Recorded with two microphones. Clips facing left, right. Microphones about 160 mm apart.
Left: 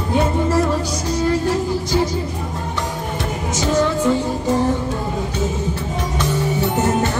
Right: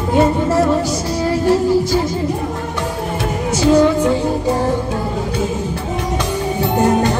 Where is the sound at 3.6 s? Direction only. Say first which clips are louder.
Right 6 dB; 10° right (ahead or behind).